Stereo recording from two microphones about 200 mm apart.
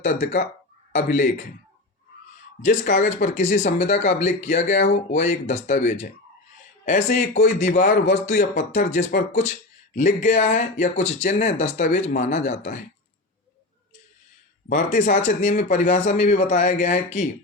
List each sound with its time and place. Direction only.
0.0 s speech: 35° left (ahead or behind)
2.6 s speech: 40° left (ahead or behind)
14.7 s speech: 40° left (ahead or behind)